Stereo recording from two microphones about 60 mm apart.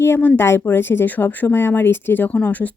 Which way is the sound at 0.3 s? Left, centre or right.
Left.